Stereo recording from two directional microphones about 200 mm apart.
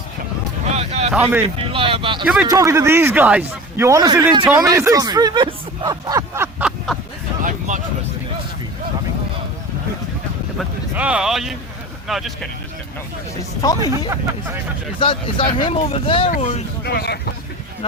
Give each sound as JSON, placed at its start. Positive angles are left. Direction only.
{"t": 0.6, "sound": "vehicle", "side_deg": -35}
{"t": 1.5, "sound": "speech", "side_deg": -25}
{"t": 2.2, "sound": "speech", "side_deg": -5}
{"t": 2.5, "sound": "a man's voice", "side_deg": -15}
{"t": 10.6, "sound": "speech", "side_deg": -5}
{"t": 13.6, "sound": "speech", "side_deg": 20}
{"t": 14.9, "sound": "speech", "side_deg": 25}
{"t": 16.8, "sound": "speech", "side_deg": 55}